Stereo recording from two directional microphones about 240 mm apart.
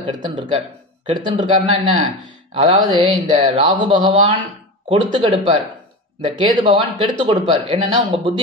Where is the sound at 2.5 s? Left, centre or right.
Right.